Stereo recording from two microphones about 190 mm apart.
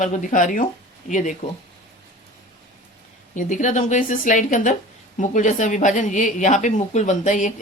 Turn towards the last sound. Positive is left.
turn(degrees=40)  # may be behind; listen again after turning